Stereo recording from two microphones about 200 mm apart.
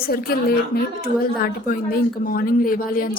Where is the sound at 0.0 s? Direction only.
50° left (ahead or behind).